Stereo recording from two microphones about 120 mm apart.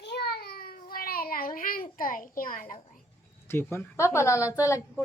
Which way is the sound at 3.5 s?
20° left (ahead or behind).